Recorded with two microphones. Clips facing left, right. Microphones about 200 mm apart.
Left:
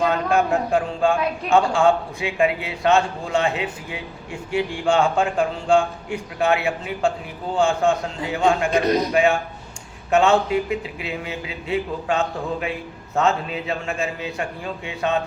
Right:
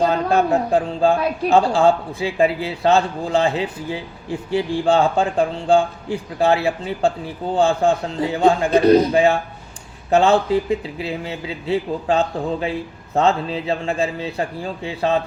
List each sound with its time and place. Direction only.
0.0 s a man's voice: 35° right (ahead or behind)